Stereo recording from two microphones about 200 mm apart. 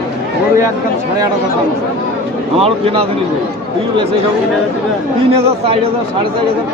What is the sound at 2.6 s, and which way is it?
Speech, 30° right (ahead or behind).